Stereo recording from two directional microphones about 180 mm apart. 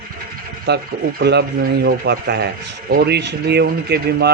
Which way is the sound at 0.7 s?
70° right (ahead or behind).